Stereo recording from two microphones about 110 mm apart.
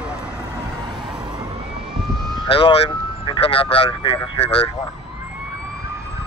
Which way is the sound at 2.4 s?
55° left (ahead or behind).